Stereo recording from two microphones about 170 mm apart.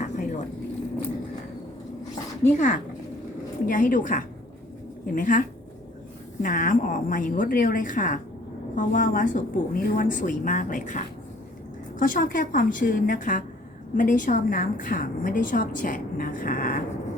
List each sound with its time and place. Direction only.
0.0 s vehicle: 45° left (ahead or behind)
2.4 s a woman's voice: 45° left (ahead or behind)